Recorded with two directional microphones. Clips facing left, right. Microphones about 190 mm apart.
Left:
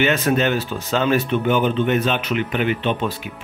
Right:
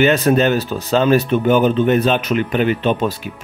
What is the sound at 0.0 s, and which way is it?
Speech, 35° right (ahead or behind).